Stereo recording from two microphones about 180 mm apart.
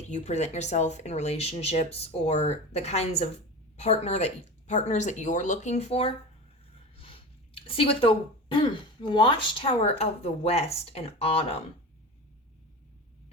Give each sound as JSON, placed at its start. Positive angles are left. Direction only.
{"t": 0.1, "sound": "speech", "side_deg": 40}